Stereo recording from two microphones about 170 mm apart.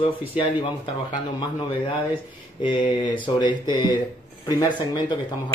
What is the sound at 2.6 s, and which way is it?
Speech, 30° left (ahead or behind).